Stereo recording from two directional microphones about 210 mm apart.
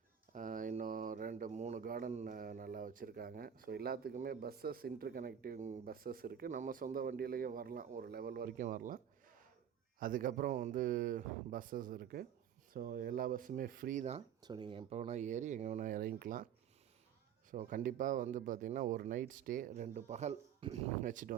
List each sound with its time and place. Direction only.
0.3 s speech: 40° right (ahead or behind)
10.0 s speech: 40° right (ahead or behind)
14.4 s speech: 20° right (ahead or behind); by 16.5 s 40° right (ahead or behind)
17.5 s speech: 40° right (ahead or behind)